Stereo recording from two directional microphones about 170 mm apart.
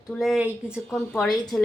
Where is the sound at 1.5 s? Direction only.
20° left (ahead or behind).